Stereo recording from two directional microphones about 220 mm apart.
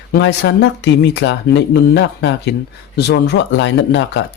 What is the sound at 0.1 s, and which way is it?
Speech, 50° left (ahead or behind).